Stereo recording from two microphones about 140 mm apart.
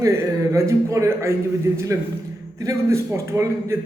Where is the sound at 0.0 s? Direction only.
20° right (ahead or behind).